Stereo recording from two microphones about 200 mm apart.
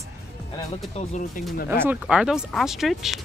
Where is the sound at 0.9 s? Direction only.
40° left (ahead or behind).